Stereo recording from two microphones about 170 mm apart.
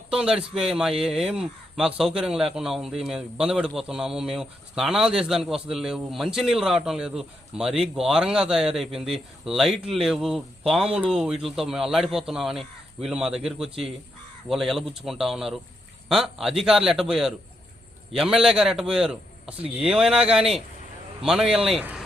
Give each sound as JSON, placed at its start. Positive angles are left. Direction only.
{"t": 0.1, "sound": "speech", "side_deg": -5}